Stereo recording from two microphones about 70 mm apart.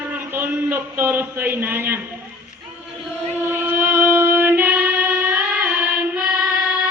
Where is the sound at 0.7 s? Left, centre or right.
Right.